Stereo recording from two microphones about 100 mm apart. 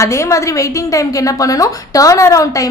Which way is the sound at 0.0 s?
30° left (ahead or behind).